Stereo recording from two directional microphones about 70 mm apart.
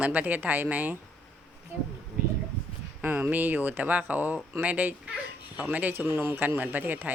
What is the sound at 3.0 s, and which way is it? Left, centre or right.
Speech, right.